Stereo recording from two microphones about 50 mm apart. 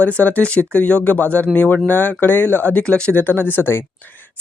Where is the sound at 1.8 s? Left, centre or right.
Left.